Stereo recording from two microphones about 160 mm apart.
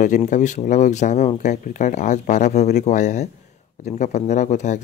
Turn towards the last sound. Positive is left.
turn(degrees=50)  # may be behind; listen again after turning